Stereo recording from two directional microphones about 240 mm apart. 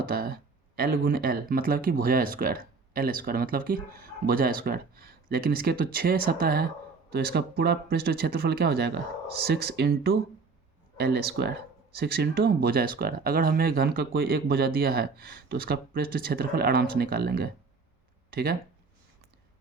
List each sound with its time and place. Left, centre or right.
0.1 s speech: right